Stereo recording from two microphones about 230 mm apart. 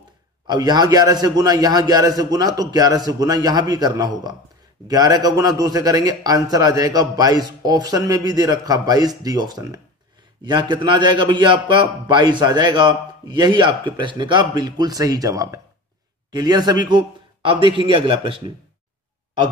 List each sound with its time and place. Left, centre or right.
0.5 s a man's voice: centre